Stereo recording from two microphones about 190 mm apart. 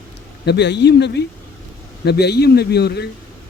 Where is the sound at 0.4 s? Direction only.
65° left (ahead or behind).